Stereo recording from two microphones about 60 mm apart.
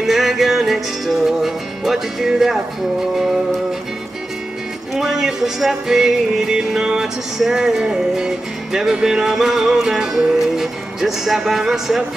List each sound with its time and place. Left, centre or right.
0.0 s music: centre
4.9 s music: centre